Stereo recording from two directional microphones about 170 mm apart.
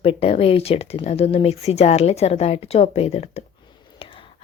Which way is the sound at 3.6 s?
30° left (ahead or behind).